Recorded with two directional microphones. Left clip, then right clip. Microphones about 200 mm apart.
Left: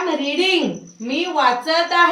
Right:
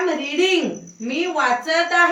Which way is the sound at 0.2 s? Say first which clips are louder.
Left 1 dB; 15° left (ahead or behind).